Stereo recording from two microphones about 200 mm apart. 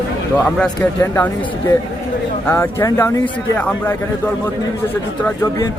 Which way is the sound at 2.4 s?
10° left (ahead or behind).